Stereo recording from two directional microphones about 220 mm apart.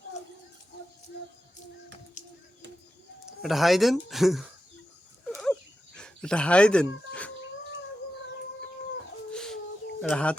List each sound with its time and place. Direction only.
2.2 s a sound: 35° left (ahead or behind)
3.4 s speech: centre (ahead or behind)
5.3 s a sound: 5° left (ahead or behind)
6.0 s speech: 5° left (ahead or behind)
9.3 s bird: 5° left (ahead or behind)
10.0 s speech: 5° left (ahead or behind)